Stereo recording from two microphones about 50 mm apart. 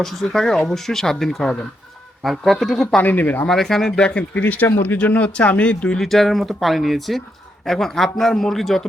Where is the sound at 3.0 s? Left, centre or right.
Left.